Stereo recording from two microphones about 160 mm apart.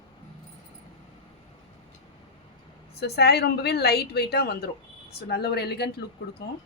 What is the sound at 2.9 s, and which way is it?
A woman's voice, 90° left.